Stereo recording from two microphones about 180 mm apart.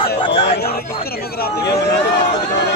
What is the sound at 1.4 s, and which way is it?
Speech, 70° left (ahead or behind).